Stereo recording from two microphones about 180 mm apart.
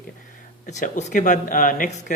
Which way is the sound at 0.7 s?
40° left (ahead or behind).